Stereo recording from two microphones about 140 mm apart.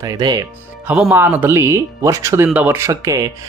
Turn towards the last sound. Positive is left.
turn(degrees=-20)  # may be behind; listen again after turning